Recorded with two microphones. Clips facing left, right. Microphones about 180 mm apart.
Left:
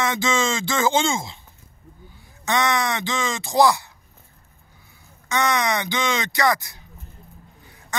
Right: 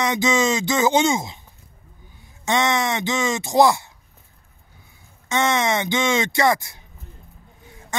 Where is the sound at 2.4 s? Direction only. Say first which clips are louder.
Right 1 dB; 20° right (ahead or behind).